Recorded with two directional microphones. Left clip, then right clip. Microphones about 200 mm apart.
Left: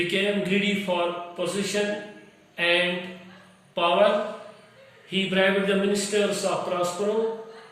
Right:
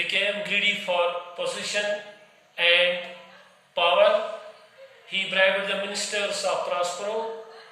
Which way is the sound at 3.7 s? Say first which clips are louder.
Right 1 dB; 15° right (ahead or behind).